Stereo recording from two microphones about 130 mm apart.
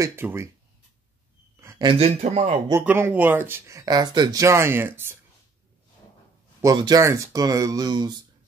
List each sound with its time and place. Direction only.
0.0 s speech: 20° right (ahead or behind)
1.6 s a sound: 20° right (ahead or behind)
1.9 s a man's voice: 50° right (ahead or behind)
2.8 s speech: 15° right (ahead or behind)
6.6 s speech: 30° right (ahead or behind)